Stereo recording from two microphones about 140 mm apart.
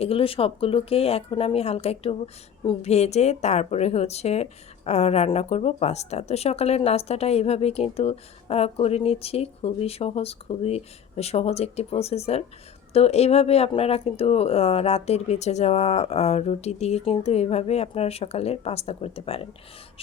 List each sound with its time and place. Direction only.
0.0 s speech: 40° left (ahead or behind)